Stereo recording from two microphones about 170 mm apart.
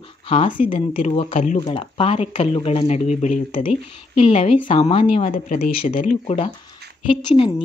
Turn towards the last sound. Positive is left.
turn(degrees=30)  # may be behind; listen again after turning